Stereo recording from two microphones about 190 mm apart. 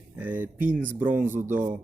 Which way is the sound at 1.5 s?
40° right (ahead or behind).